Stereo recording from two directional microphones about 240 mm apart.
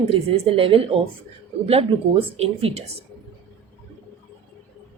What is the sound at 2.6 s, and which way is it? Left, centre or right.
Speech, right.